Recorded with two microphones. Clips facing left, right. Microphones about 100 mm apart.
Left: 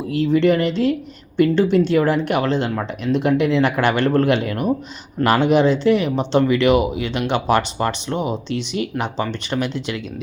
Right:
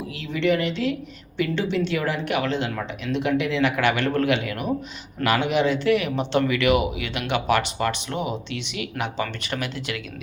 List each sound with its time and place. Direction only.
0.1 s speech: 40° left (ahead or behind); by 10.0 s 20° left (ahead or behind)